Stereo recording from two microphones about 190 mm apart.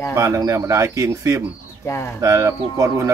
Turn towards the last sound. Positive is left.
turn(degrees=-15)  # may be behind; listen again after turning